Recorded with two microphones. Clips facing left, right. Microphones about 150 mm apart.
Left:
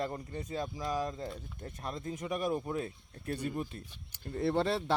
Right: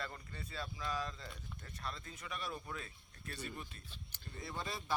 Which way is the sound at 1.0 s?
45° left (ahead or behind).